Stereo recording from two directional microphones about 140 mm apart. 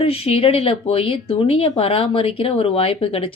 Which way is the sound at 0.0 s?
45° left (ahead or behind).